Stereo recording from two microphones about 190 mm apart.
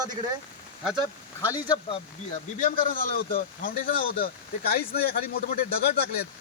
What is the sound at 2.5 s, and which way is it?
Speech, 45° left (ahead or behind).